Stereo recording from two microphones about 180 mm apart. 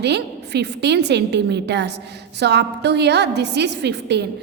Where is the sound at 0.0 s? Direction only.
70° right (ahead or behind).